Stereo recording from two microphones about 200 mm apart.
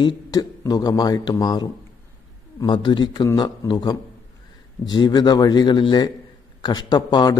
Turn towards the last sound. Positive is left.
turn(degrees=20)  # may be behind; listen again after turning